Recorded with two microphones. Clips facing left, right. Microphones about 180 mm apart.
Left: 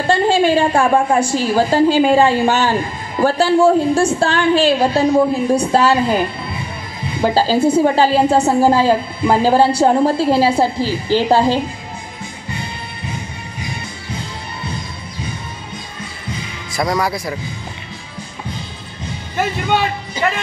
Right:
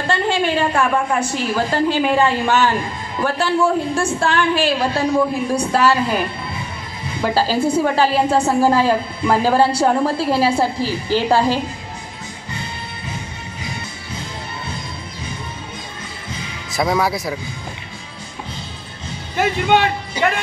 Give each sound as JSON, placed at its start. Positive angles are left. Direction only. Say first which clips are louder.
{"t": 0.1, "sound": "a woman's voice", "louder": "left 6 dB", "side_deg": 30}
{"t": 16.7, "sound": "speech", "louder": "even", "side_deg": -5}
{"t": 19.3, "sound": "a man's voice", "louder": "right 2 dB", "side_deg": -15}